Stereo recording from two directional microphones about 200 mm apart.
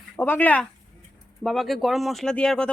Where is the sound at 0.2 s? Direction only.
10° left (ahead or behind).